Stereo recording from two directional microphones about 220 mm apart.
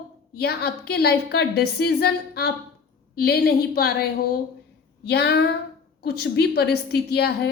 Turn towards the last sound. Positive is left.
turn(degrees=45)  # may be behind; listen again after turning